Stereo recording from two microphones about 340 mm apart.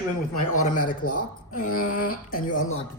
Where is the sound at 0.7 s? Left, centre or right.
Left.